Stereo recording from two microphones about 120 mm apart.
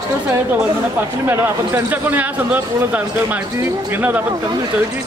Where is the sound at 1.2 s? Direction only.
20° right (ahead or behind).